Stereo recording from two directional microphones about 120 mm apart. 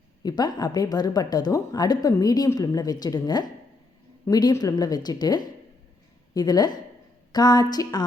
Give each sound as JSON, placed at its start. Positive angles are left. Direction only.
{"t": 0.2, "sound": "speech", "side_deg": 35}